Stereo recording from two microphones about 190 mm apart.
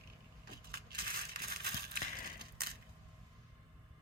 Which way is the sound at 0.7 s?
55° right (ahead or behind).